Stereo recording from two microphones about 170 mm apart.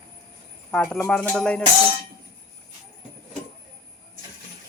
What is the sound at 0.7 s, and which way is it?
Speech, 5° left (ahead or behind).